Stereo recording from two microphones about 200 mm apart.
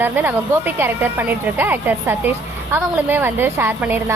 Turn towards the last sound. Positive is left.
turn(degrees=-10)  # may be behind; listen again after turning